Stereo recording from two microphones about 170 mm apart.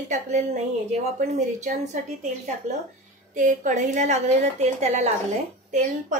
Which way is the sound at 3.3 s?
50° right (ahead or behind).